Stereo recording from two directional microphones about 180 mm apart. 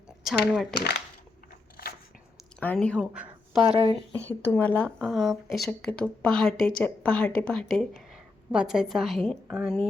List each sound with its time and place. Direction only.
0.3 s speech: centre (ahead or behind)
0.7 s speech: 65° left (ahead or behind)
2.6 s speech: 5° left (ahead or behind)
3.0 s a sound: 5° right (ahead or behind)
3.7 s speech: 30° right (ahead or behind)
4.3 s speech: 10° left (ahead or behind)